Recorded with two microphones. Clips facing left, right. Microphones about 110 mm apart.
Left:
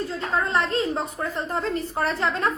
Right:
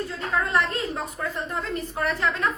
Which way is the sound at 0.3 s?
30° left (ahead or behind).